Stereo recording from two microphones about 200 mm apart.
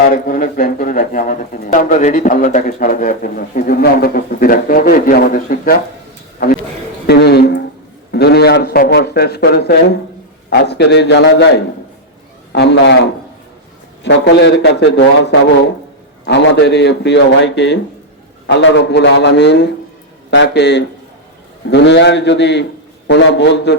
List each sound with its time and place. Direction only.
0.1 s speech: 45° left (ahead or behind)
7.1 s a sound: 55° left (ahead or behind)
8.1 s a man's voice: 55° left (ahead or behind)